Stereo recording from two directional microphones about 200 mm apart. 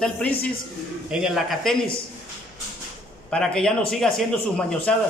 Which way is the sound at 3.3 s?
5° left (ahead or behind).